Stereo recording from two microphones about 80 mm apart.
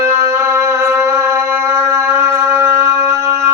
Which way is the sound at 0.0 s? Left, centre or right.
Right.